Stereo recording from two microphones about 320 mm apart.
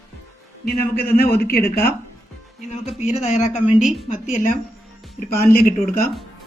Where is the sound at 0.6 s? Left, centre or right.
Left.